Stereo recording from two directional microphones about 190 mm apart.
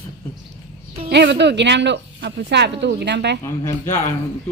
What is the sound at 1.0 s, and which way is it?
Speech, 60° right (ahead or behind).